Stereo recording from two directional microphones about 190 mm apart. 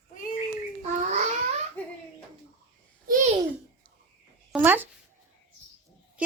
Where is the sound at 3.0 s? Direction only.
45° right (ahead or behind).